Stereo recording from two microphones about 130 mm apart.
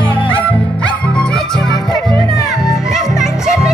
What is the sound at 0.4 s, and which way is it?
Music, 10° left (ahead or behind).